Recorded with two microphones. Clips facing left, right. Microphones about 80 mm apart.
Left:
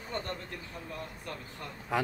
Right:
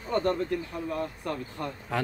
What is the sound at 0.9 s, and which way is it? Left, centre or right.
Speech, right.